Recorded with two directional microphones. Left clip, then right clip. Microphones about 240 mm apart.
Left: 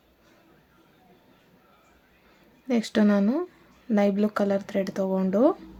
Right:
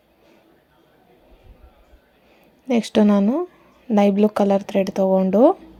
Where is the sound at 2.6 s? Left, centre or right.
Centre.